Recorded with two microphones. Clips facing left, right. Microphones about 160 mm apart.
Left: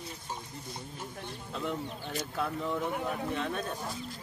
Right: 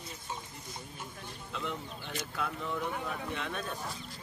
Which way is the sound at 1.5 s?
40° left (ahead or behind).